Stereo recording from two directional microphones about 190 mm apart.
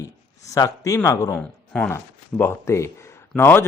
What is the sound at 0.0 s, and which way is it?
Speech, 15° left (ahead or behind).